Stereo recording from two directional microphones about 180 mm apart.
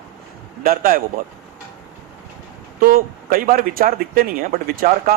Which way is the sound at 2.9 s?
55° right (ahead or behind).